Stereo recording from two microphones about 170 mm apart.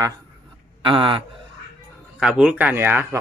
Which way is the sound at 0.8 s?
30° right (ahead or behind).